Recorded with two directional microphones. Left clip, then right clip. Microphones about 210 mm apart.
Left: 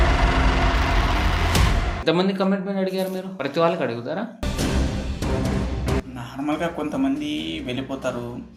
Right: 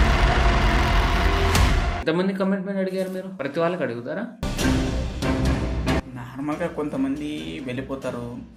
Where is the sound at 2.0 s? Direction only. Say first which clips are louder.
Left 4 dB; 5° right (ahead or behind).